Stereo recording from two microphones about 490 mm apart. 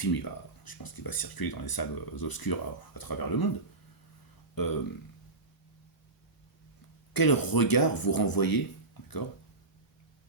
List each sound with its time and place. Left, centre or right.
0.0 s speech: left
4.5 s speech: left
7.1 s speech: left